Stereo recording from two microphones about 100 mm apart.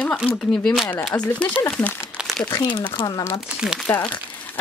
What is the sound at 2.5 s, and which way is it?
Speech, 45° left (ahead or behind).